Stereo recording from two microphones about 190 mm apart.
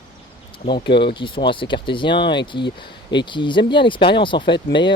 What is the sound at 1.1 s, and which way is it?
Speech, 25° left (ahead or behind).